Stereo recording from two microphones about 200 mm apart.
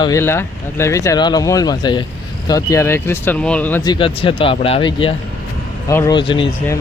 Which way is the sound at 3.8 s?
25° left (ahead or behind).